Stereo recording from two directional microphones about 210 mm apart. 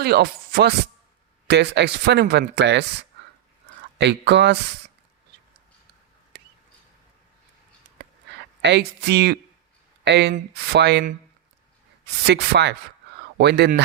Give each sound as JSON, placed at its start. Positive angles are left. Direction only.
{"t": 0.0, "sound": "speech", "side_deg": -50}
{"t": 3.9, "sound": "speech", "side_deg": -55}
{"t": 8.6, "sound": "speech", "side_deg": -55}
{"t": 12.2, "sound": "speech", "side_deg": -55}